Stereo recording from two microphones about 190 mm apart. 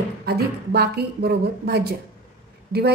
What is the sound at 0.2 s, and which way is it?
Speech, 55° right (ahead or behind).